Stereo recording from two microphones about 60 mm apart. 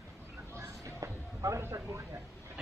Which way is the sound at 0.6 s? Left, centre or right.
Right.